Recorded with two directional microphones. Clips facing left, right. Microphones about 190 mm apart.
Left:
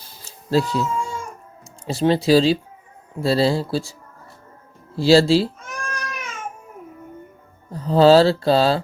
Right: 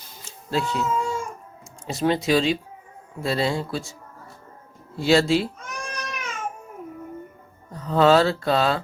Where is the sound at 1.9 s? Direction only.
30° left (ahead or behind).